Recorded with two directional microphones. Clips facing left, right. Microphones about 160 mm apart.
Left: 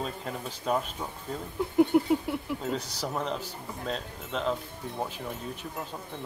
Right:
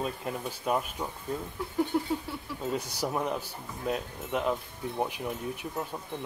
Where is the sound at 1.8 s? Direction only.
15° left (ahead or behind).